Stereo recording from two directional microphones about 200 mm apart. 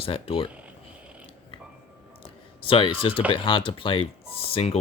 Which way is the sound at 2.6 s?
25° left (ahead or behind).